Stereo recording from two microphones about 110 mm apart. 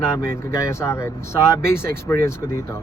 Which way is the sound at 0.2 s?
25° left (ahead or behind).